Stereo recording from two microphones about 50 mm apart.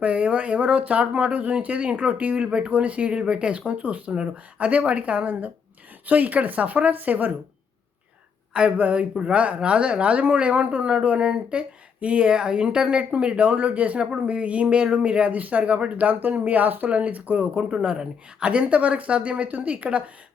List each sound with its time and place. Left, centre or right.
0.0 s speech: right
8.5 s speech: right
17.6 s speech: centre